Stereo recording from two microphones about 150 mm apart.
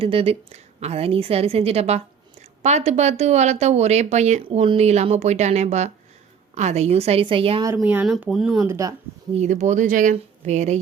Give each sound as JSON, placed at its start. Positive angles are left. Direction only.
{"t": 0.0, "sound": "a woman's voice", "side_deg": -40}
{"t": 4.4, "sound": "speech", "side_deg": -35}
{"t": 7.8, "sound": "speech", "side_deg": -5}
{"t": 8.6, "sound": "speech", "side_deg": -20}
{"t": 9.3, "sound": "speech", "side_deg": -50}